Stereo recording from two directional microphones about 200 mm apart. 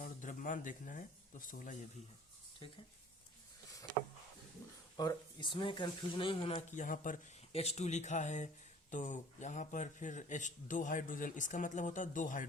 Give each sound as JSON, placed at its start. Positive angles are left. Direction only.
{"t": 0.0, "sound": "speech", "side_deg": 40}
{"t": 4.9, "sound": "speech", "side_deg": 20}